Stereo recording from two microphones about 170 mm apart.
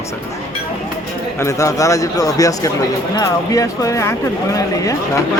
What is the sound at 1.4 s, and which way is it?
Speech, 20° left (ahead or behind).